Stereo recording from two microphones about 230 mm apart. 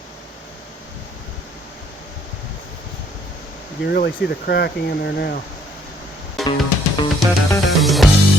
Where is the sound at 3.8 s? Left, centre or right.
Left.